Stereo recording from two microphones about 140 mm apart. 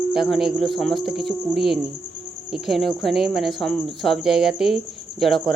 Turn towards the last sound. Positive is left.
turn(degrees=0)  # may be behind; listen again after turning